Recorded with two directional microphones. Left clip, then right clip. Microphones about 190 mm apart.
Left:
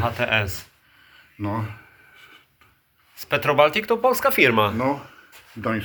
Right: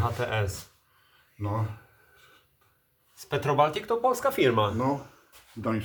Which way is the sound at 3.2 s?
20° left (ahead or behind).